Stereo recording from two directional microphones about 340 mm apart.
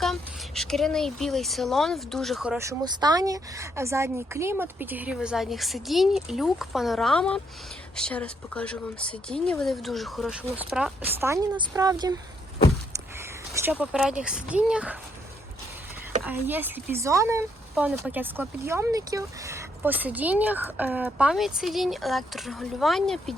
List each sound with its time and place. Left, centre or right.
0.0 s speech: centre
13.5 s speech: centre
16.2 s speech: centre